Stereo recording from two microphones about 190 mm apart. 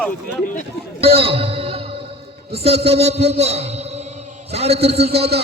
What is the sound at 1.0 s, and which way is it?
A man's voice, 30° right (ahead or behind).